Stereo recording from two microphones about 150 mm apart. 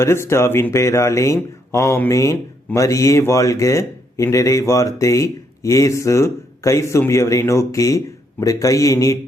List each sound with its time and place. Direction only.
0.0 s speech: 15° left (ahead or behind)